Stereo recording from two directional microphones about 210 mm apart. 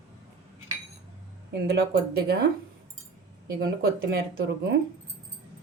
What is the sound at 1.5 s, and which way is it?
Speech, 50° right (ahead or behind).